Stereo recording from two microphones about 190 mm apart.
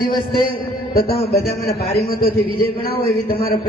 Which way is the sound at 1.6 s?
55° left (ahead or behind).